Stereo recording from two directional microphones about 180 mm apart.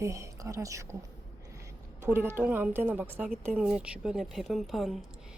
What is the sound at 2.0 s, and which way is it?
A woman's voice, 15° right (ahead or behind).